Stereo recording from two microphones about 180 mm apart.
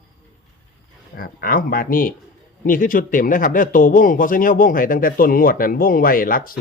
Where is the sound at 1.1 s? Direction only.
55° left (ahead or behind).